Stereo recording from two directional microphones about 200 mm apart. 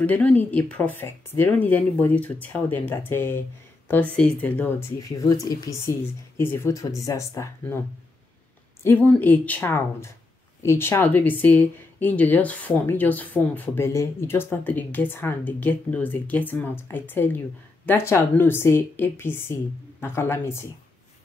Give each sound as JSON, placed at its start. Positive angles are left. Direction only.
{"t": 0.0, "sound": "speech", "side_deg": 5}
{"t": 8.8, "sound": "speech", "side_deg": 10}